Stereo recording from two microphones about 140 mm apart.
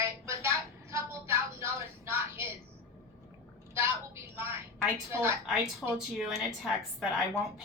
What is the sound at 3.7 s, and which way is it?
A woman's voice, 15° right (ahead or behind).